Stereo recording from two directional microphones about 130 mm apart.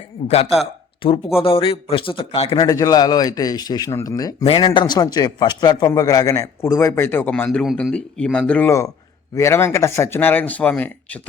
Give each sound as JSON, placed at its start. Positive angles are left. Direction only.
{"t": 0.3, "sound": "a man's voice", "side_deg": 50}
{"t": 2.6, "sound": "a man's voice", "side_deg": 30}
{"t": 4.4, "sound": "a man's voice", "side_deg": 40}
{"t": 9.3, "sound": "speech", "side_deg": 20}